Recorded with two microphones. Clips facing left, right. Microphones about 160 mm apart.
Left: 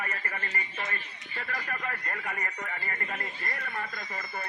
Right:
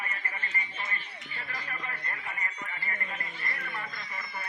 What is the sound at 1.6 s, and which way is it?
A man's voice, 50° left (ahead or behind).